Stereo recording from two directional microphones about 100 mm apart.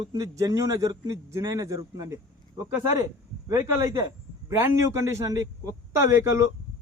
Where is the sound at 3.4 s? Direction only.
30° right (ahead or behind).